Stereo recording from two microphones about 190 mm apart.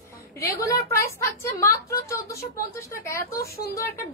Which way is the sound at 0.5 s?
15° left (ahead or behind).